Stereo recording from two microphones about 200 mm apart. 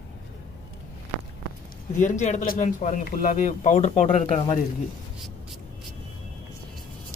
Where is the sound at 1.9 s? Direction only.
35° left (ahead or behind).